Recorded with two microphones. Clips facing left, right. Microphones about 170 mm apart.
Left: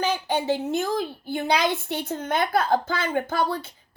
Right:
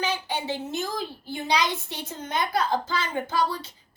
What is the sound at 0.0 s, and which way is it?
A woman's voice, 50° left (ahead or behind).